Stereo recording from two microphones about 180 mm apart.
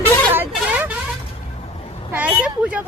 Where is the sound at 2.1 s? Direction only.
10° right (ahead or behind).